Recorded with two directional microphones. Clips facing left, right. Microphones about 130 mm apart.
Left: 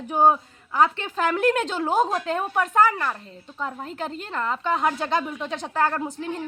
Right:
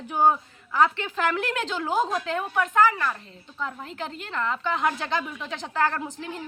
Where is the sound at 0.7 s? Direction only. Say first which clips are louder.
Left 1 dB; 40° left (ahead or behind).